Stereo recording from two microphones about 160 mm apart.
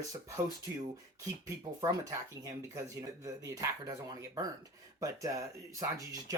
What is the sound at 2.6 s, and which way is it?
Speech, 15° right (ahead or behind).